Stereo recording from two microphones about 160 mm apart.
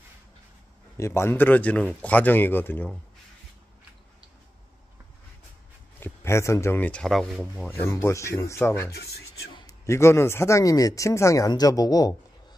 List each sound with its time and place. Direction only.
0.9 s speech: 15° left (ahead or behind)
5.9 s speech: 15° left (ahead or behind); by 7.7 s centre (ahead or behind)
7.8 s speech: 15° left (ahead or behind)
8.9 s a sound: 85° left
9.7 s speech: 15° left (ahead or behind)